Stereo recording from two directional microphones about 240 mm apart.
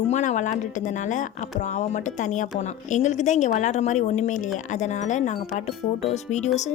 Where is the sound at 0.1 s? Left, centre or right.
Left.